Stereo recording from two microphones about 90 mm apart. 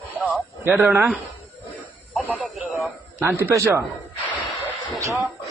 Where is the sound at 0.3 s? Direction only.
15° right (ahead or behind).